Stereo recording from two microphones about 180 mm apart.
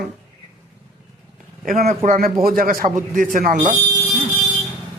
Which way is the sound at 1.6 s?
40° right (ahead or behind).